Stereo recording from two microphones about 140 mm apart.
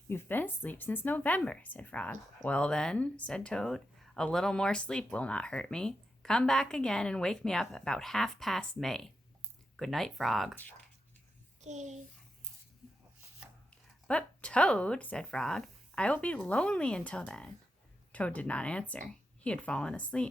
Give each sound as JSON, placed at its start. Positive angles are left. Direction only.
{"t": 0.1, "sound": "speech", "side_deg": 15}
{"t": 11.6, "sound": "a child's voice", "side_deg": -55}
{"t": 14.1, "sound": "speech", "side_deg": 10}